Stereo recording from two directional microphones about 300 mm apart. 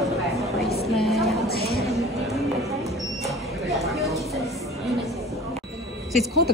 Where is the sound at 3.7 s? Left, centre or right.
Centre.